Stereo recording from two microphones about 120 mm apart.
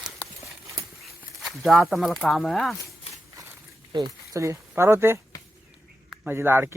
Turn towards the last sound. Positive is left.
turn(degrees=-20)  # may be behind; listen again after turning